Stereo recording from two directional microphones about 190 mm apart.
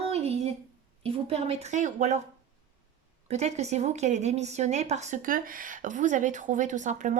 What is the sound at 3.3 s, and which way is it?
A woman's voice, 35° right (ahead or behind).